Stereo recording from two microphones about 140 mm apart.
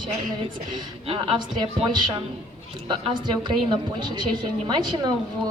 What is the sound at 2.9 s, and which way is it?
A woman's voice, 35° right (ahead or behind).